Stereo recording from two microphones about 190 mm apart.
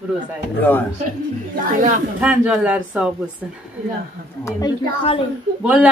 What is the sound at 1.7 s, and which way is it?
Speech, 40° right (ahead or behind).